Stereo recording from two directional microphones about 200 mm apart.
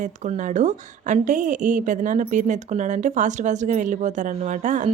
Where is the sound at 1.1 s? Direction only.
40° right (ahead or behind).